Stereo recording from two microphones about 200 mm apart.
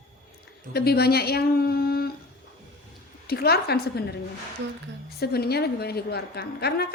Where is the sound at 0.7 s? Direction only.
50° left (ahead or behind).